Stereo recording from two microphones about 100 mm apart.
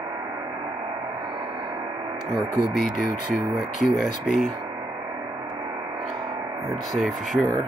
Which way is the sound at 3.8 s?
Centre (ahead or behind).